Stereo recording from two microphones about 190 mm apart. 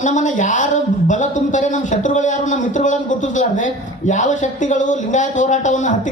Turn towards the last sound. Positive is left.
turn(degrees=40)  # may be behind; listen again after turning